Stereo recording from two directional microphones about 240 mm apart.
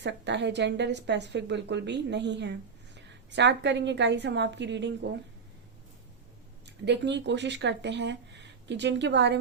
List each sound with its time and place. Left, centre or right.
0.0 s a woman's voice: right
6.7 s a woman's voice: right